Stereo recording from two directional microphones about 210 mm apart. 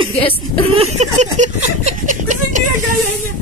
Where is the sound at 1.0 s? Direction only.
35° right (ahead or behind).